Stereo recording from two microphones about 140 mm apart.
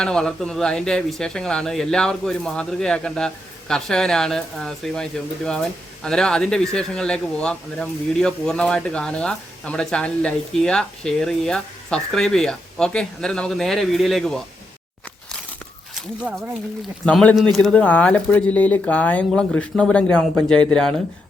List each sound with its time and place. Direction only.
0.0 s speech: 5° left (ahead or behind)
16.0 s speech: centre (ahead or behind)